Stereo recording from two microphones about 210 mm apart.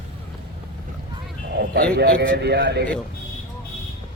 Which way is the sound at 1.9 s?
50° right (ahead or behind).